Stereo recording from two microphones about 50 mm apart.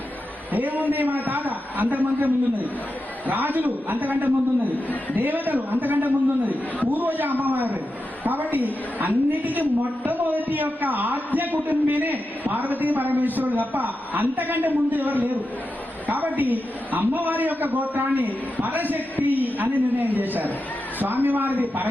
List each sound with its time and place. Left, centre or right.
0.5 s a man's voice: right